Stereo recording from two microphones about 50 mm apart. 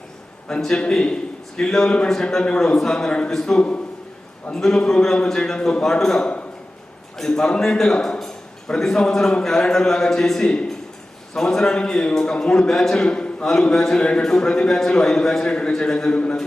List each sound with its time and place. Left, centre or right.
0.8 s a man's voice: centre
3.1 s a man's voice: left
3.3 s a man's voice: centre
5.8 s a man's voice: centre
8.2 s a sound: centre
9.4 s a man's voice: centre